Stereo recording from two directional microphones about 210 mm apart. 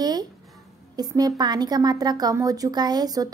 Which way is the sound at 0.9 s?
20° right (ahead or behind).